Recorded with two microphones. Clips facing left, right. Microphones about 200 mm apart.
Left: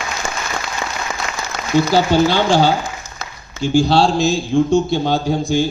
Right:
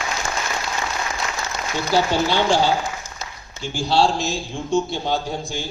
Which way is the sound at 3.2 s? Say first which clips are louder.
Left 13 dB; 90° left.